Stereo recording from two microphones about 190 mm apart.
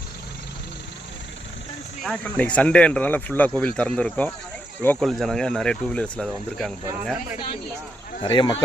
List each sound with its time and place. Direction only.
2.0 s speech: 5° left (ahead or behind)
8.2 s speech: 25° left (ahead or behind)